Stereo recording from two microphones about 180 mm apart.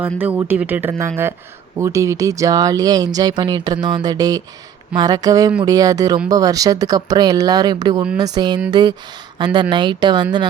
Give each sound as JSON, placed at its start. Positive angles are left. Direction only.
{"t": 0.0, "sound": "speech", "side_deg": -10}